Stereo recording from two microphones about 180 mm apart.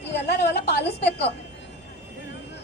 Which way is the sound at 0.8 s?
70° left (ahead or behind).